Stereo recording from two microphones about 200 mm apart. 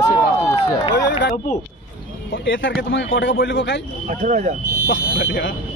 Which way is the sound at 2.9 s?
70° left (ahead or behind).